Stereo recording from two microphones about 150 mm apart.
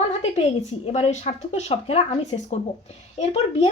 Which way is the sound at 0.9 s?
45° left (ahead or behind).